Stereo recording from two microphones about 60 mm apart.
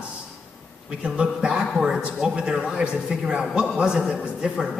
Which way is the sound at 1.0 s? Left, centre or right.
Centre.